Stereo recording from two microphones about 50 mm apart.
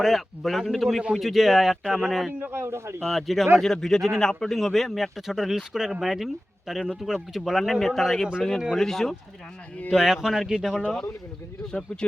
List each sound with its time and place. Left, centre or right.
0.0 s speech: centre
2.4 s a man's voice: right
3.0 s speech: centre
9.9 s speech: centre
10.8 s speech: centre